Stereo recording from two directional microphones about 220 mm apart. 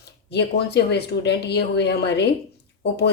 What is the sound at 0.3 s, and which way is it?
A woman's voice, 50° left (ahead or behind).